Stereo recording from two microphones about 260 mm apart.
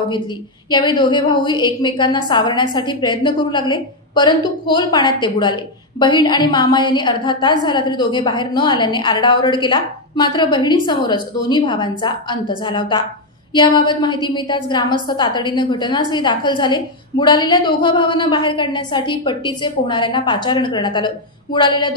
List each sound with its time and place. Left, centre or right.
0.7 s a woman's voice: centre